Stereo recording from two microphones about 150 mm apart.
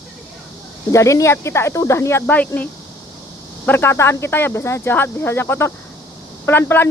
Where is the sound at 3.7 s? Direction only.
15° left (ahead or behind).